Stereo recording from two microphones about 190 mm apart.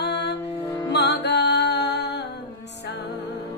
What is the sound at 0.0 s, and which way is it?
Music, 65° left (ahead or behind).